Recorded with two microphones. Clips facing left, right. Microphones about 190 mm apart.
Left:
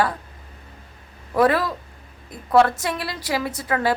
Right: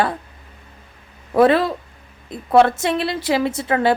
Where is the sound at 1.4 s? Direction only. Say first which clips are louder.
Right 4 dB; 25° right (ahead or behind).